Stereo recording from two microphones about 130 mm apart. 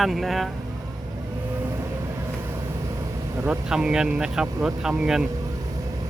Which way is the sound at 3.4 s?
5° right (ahead or behind).